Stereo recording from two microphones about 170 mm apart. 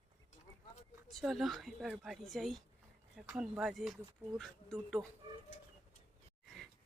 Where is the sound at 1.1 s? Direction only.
Centre (ahead or behind).